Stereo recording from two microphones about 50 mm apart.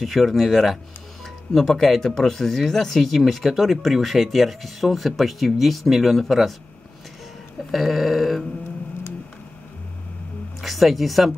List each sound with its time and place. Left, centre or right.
0.0 s speech: centre
7.7 s speech: centre
10.6 s speech: centre